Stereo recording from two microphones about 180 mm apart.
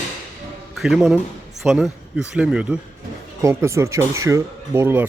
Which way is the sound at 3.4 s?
15° right (ahead or behind).